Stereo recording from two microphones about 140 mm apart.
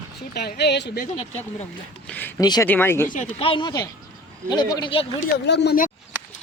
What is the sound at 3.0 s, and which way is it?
Speech, 70° left (ahead or behind).